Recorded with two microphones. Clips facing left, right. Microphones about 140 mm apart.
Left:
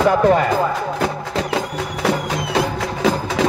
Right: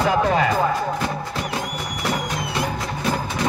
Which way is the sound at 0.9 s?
90° left.